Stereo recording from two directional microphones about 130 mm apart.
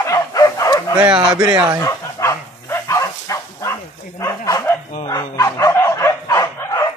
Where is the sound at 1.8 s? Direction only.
25° left (ahead or behind).